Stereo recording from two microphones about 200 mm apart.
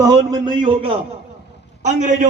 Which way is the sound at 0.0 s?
20° right (ahead or behind).